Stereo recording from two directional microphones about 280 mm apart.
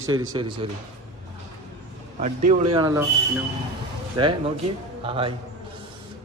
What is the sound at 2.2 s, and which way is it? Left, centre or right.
Speech, right.